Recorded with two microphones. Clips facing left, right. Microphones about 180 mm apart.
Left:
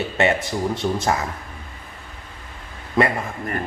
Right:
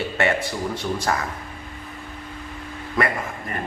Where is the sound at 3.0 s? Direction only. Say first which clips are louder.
Left 4 dB; 25° left (ahead or behind).